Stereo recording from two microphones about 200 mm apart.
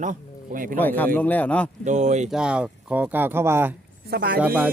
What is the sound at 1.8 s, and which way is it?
Speech, 35° right (ahead or behind).